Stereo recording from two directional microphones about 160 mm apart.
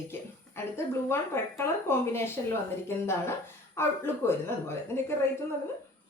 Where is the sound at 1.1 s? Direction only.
15° left (ahead or behind).